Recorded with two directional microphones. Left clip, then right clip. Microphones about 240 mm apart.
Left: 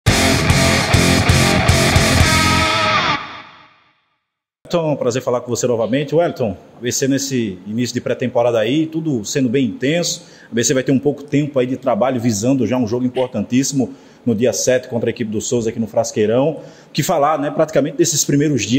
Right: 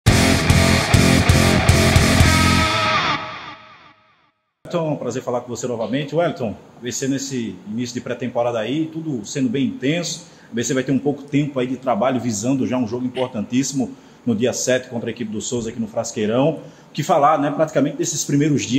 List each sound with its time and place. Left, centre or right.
0.0 s music: centre
4.6 s speech: left